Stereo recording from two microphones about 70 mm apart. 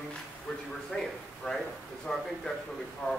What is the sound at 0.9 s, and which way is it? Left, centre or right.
Speech, centre.